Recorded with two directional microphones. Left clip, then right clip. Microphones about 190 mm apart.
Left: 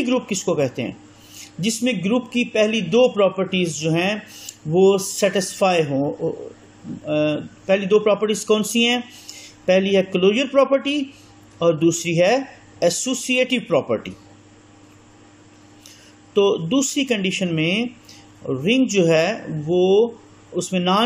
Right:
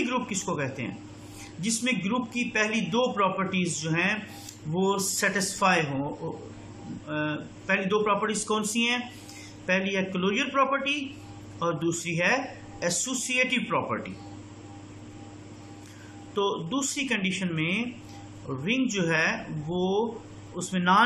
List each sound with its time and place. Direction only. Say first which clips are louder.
0.0 s a man's voice: left 7 dB; 20° left (ahead or behind)
7.1 s speech: left 11 dB; 20° left (ahead or behind)
16.3 s speech: left 10 dB; 20° left (ahead or behind)